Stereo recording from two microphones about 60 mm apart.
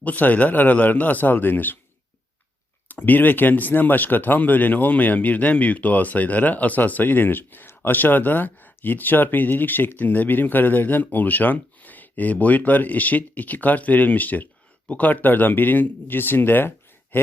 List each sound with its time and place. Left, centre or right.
0.0 s speech: left
2.9 s speech: left